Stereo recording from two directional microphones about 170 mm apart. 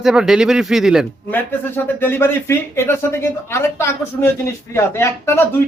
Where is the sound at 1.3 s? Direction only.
10° left (ahead or behind).